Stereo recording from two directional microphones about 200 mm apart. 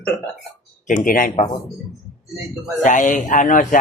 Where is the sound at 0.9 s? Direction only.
45° left (ahead or behind).